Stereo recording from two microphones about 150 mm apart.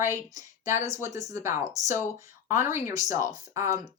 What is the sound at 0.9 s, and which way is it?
Speech, 20° right (ahead or behind).